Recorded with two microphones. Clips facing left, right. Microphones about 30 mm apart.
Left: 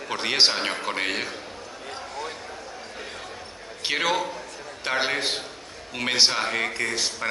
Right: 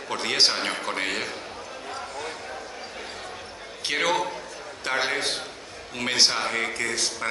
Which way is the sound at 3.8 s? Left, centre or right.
Centre.